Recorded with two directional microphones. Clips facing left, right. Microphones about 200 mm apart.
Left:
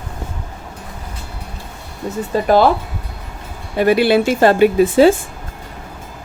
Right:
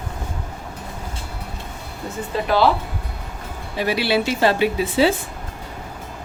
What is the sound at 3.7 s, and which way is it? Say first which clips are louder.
Speech: left 8 dB; 50° left (ahead or behind).